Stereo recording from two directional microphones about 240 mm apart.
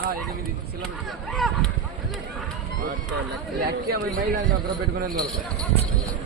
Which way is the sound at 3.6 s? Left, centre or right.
Right.